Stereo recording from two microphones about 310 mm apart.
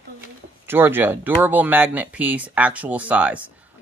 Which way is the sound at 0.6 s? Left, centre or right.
Centre.